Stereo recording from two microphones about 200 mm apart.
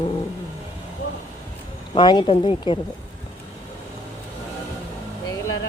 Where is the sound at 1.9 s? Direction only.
20° left (ahead or behind).